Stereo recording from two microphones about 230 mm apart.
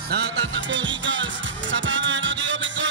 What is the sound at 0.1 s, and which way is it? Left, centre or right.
Music, right.